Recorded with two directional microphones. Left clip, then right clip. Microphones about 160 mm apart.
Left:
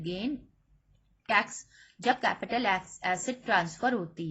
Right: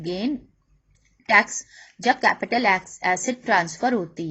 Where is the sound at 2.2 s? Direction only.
40° right (ahead or behind).